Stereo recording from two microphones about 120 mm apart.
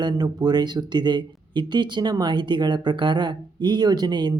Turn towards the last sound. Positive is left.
turn(degrees=-35)  # may be behind; listen again after turning